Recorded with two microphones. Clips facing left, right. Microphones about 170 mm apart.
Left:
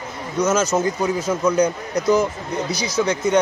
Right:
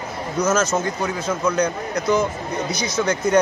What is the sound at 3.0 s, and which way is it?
Speech, 5° left (ahead or behind).